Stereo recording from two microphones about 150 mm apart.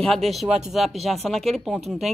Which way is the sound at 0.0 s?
Centre (ahead or behind).